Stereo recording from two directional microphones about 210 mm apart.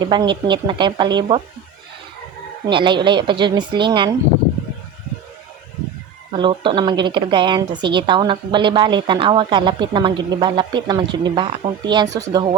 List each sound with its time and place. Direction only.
0.1 s a woman's voice: 20° right (ahead or behind)
2.6 s a woman's voice: 20° right (ahead or behind)
6.3 s a woman's voice: 25° right (ahead or behind)